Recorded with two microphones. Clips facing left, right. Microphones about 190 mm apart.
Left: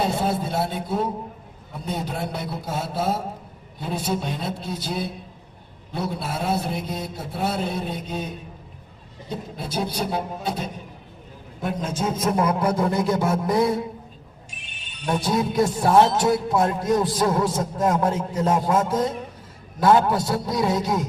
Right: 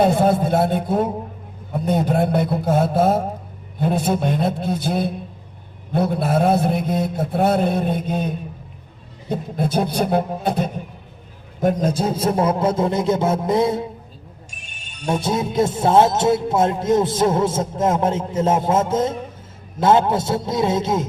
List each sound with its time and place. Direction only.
0.0 s mantra: 50° right (ahead or behind)
11.6 s speech: 40° right (ahead or behind); by 13.8 s 25° right (ahead or behind)
14.5 s a sound: 45° right (ahead or behind)
15.1 s speech: 20° right (ahead or behind)